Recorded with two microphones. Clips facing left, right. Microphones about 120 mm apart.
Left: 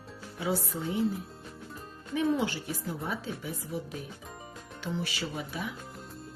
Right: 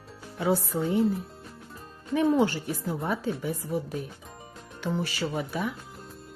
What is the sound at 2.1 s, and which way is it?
Speech, 50° right (ahead or behind).